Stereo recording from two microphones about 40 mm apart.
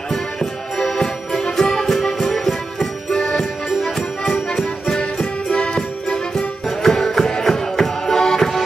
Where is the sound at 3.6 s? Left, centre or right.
Centre.